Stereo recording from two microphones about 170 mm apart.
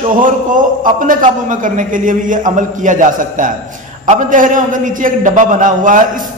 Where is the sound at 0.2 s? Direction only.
50° right (ahead or behind).